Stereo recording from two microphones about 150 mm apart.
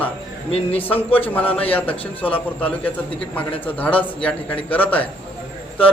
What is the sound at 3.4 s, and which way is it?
A man's voice, 10° left (ahead or behind).